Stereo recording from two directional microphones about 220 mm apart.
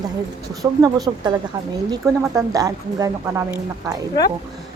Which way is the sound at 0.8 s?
15° right (ahead or behind).